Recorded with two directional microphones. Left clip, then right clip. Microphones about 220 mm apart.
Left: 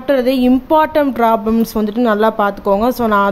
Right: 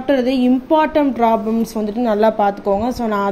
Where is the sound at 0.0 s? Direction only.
15° left (ahead or behind).